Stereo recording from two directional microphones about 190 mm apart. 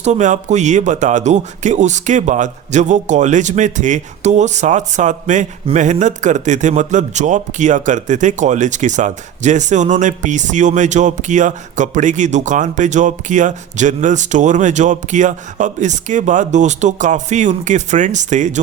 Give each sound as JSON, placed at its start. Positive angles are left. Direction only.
{"t": 0.0, "sound": "speech", "side_deg": -40}